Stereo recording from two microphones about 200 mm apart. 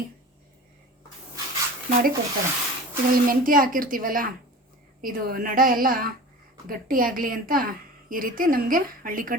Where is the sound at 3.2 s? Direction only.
45° right (ahead or behind).